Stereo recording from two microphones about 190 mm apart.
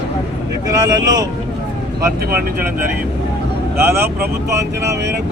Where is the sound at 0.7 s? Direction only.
20° right (ahead or behind).